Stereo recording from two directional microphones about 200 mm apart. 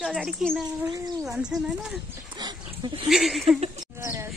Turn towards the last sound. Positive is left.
turn(degrees=-15)  # may be behind; listen again after turning